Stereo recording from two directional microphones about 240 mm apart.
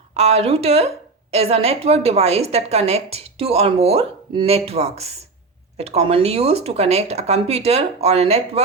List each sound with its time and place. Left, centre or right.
0.2 s a woman's voice: right